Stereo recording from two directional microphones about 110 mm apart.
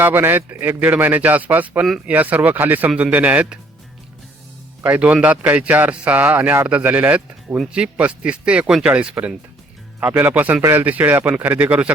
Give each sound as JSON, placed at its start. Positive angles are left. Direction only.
{"t": 0.0, "sound": "a man's voice", "side_deg": -20}
{"t": 4.8, "sound": "a man's voice", "side_deg": -10}